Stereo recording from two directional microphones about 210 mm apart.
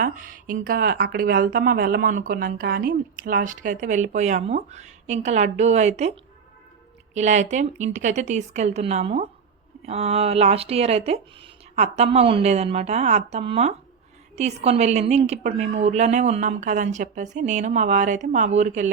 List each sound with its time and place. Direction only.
0.0 s speech: 40° right (ahead or behind)